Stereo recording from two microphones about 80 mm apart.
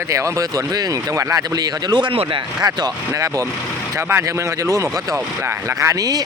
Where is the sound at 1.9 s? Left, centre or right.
Right.